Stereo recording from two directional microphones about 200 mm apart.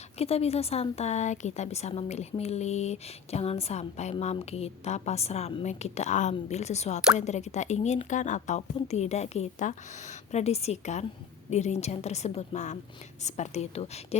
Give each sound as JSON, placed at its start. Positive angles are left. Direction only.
{"t": 0.2, "sound": "speech", "side_deg": 30}